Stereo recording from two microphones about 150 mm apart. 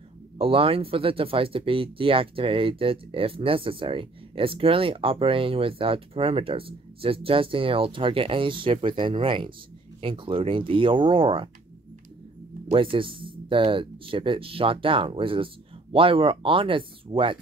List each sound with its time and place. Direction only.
0.4 s speech: 40° right (ahead or behind)
12.6 s speech: 35° right (ahead or behind)